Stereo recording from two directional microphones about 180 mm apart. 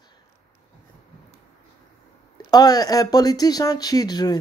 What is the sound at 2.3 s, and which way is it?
Speech, 20° left (ahead or behind).